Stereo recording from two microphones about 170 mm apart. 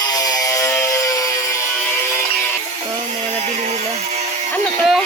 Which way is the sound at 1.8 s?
15° left (ahead or behind).